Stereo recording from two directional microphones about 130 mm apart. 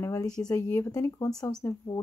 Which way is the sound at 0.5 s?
20° left (ahead or behind).